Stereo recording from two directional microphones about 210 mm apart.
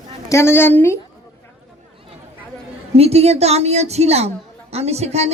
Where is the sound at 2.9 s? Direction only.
30° right (ahead or behind).